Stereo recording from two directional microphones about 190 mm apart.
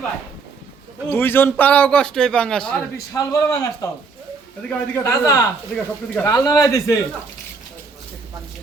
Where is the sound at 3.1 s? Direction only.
15° left (ahead or behind).